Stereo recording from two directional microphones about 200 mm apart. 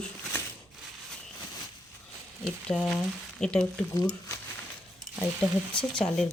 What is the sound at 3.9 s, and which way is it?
Speech, 15° left (ahead or behind).